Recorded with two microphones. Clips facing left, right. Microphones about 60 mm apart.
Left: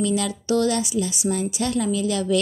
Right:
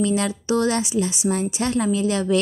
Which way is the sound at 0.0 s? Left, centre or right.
Right.